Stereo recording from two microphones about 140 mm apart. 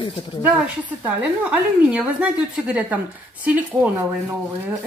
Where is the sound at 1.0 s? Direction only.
10° right (ahead or behind).